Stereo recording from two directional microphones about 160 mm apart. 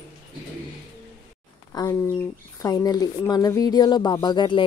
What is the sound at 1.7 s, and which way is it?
A woman's voice, 20° left (ahead or behind).